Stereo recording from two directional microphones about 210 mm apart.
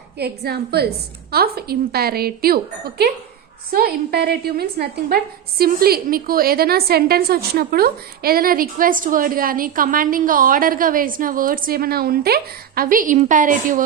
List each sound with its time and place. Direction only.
0.2 s a woman's voice: 50° right (ahead or behind)
3.7 s a woman's voice: 45° right (ahead or behind)